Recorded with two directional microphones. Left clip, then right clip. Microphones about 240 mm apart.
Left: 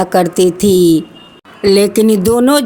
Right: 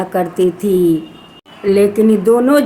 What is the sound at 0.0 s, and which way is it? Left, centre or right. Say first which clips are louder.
Speech: left 4 dB; left.